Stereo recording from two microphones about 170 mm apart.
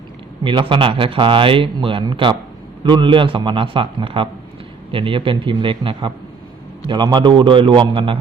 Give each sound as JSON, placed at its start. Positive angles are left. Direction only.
{"t": 0.4, "sound": "a man's voice", "side_deg": -30}